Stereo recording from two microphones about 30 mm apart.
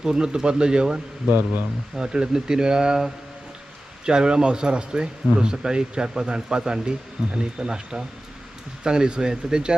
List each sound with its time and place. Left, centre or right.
0.0 s speech: right
1.3 s speech: right
2.0 s speech: right
4.0 s speech: right